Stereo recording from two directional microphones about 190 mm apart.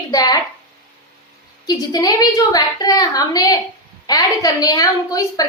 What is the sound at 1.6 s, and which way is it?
A woman's voice, 20° left (ahead or behind).